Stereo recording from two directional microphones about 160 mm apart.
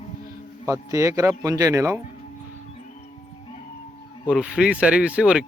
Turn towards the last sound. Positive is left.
turn(degrees=-5)  # may be behind; listen again after turning